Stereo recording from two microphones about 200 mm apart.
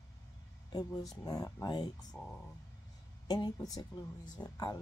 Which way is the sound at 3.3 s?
20° left (ahead or behind).